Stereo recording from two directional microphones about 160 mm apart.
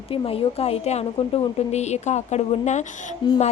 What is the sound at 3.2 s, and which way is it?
Speech, 30° left (ahead or behind).